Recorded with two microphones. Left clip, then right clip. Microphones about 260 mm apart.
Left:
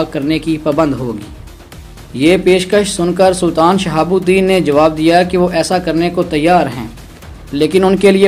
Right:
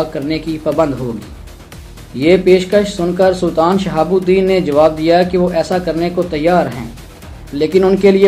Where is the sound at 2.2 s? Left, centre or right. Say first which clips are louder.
Even; left.